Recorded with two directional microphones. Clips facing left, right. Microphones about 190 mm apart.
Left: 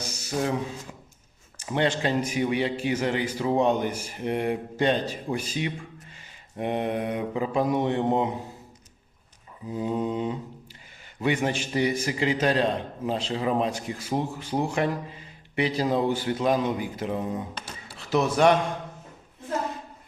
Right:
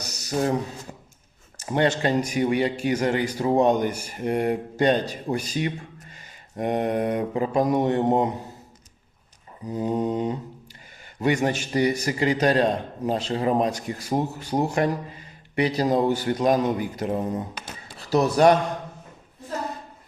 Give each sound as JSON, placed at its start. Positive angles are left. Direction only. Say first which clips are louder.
{"t": 0.0, "sound": "a man's voice", "louder": "right 3 dB", "side_deg": -40}
{"t": 9.6, "sound": "a man's voice", "louder": "right 3 dB", "side_deg": -45}